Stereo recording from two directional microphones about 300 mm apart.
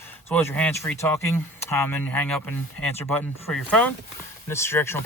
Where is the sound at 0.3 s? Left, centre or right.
Centre.